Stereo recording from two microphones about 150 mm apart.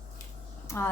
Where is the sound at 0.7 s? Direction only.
20° left (ahead or behind).